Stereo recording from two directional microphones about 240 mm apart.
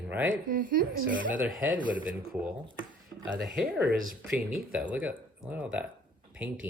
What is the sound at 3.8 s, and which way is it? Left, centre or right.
Speech, right.